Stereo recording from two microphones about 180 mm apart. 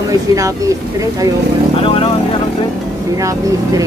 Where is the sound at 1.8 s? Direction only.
30° left (ahead or behind).